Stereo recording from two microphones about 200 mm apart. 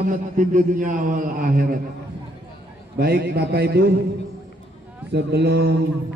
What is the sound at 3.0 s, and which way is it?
Speech, 50° right (ahead or behind).